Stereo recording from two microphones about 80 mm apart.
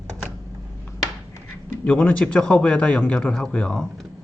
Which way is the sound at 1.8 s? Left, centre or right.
Centre.